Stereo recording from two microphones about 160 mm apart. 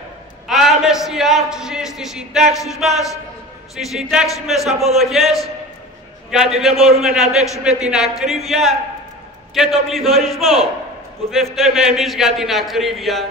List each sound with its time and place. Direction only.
0.5 s a man's voice: centre (ahead or behind)
6.7 s a man's voice: 40° right (ahead or behind)
7.0 s a man's voice: centre (ahead or behind)